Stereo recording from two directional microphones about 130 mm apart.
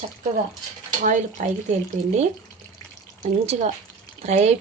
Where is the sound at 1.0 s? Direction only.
75° right (ahead or behind).